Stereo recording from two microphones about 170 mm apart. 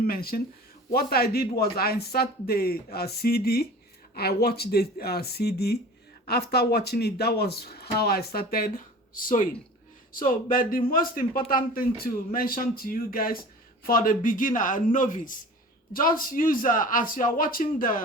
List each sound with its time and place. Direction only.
0.0 s a man's voice: 65° left (ahead or behind)